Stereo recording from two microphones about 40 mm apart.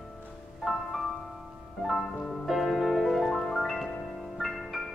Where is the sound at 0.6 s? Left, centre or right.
Centre.